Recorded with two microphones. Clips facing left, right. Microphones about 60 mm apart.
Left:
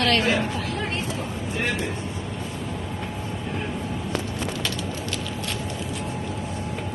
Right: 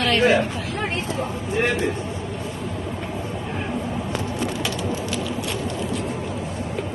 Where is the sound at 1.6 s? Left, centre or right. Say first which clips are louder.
Right 5 dB; right.